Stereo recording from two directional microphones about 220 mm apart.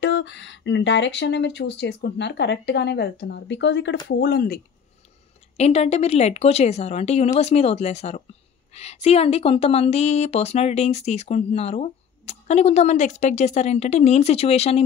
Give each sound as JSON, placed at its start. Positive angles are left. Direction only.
{"t": 0.0, "sound": "speech", "side_deg": 55}
{"t": 5.6, "sound": "speech", "side_deg": 30}